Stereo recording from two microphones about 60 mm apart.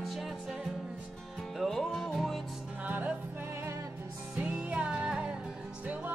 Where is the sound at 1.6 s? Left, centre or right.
Centre.